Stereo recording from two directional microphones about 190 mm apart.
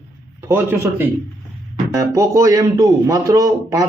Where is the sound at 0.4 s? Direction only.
10° right (ahead or behind).